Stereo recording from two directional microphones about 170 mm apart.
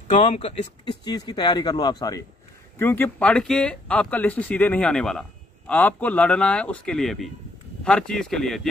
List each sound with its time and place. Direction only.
0.1 s speech: 35° left (ahead or behind)
1.0 s speech: 25° left (ahead or behind)
2.8 s speech: 10° left (ahead or behind)